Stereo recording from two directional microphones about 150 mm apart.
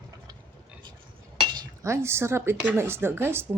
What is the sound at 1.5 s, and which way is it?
Speech, 25° right (ahead or behind).